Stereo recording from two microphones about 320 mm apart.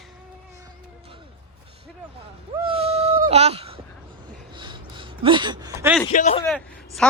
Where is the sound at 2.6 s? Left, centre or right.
Centre.